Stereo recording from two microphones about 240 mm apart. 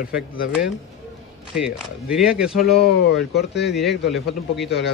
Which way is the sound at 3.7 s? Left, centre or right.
Centre.